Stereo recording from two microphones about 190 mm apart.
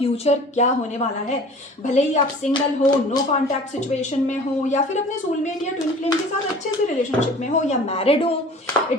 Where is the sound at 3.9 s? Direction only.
40° left (ahead or behind).